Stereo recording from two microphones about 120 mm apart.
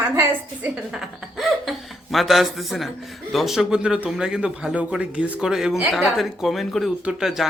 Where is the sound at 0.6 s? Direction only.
5° right (ahead or behind).